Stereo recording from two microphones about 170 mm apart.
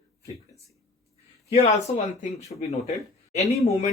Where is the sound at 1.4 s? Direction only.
40° left (ahead or behind).